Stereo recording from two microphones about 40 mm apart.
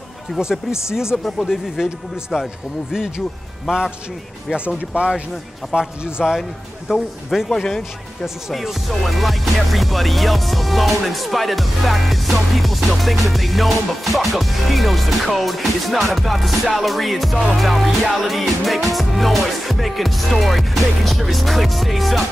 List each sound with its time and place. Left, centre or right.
0.4 s speech: centre
2.3 s speech: centre
3.7 s speech: centre
4.9 s a man's voice: right
6.9 s speech: centre
8.5 s music: centre